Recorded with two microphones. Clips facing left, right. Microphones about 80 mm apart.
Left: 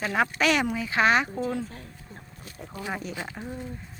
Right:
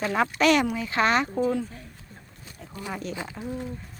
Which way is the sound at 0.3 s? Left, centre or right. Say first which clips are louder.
Right 3 dB; centre.